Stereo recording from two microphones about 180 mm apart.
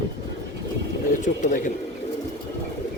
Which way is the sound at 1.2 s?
45° left (ahead or behind).